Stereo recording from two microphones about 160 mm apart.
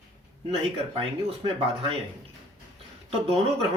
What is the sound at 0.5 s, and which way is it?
Speech, 35° right (ahead or behind).